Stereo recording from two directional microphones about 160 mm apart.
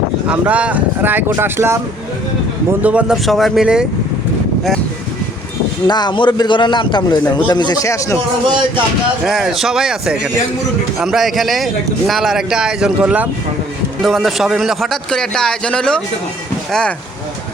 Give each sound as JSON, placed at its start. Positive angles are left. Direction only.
{"t": 0.3, "sound": "speech", "side_deg": -10}
{"t": 2.8, "sound": "speech", "side_deg": -5}
{"t": 5.9, "sound": "a man's voice", "side_deg": 30}
{"t": 8.4, "sound": "speech", "side_deg": -30}
{"t": 9.2, "sound": "speech", "side_deg": 0}